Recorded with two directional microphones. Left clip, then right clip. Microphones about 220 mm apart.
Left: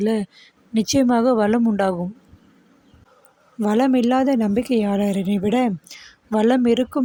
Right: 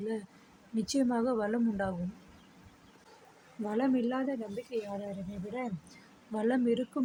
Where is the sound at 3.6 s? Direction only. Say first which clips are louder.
Left 13 dB; 45° left (ahead or behind).